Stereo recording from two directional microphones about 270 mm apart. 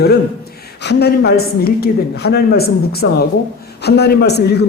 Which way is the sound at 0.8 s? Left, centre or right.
Left.